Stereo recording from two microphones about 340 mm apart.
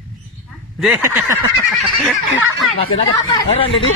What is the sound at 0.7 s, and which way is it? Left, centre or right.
Speech, centre.